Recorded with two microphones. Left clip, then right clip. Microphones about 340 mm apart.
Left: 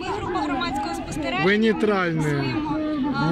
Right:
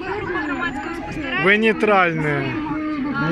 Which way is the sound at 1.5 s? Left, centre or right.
Centre.